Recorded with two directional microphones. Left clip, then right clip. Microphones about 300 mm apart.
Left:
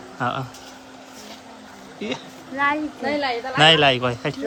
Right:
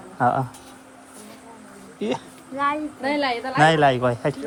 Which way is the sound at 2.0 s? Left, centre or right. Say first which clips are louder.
Right 3 dB; centre.